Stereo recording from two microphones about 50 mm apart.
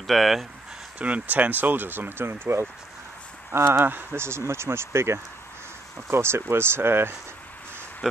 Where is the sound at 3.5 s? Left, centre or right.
Right.